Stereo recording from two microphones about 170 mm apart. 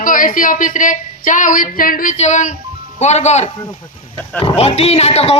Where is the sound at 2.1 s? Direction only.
45° left (ahead or behind).